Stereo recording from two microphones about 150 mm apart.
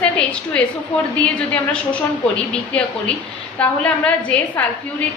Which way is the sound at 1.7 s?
5° left (ahead or behind).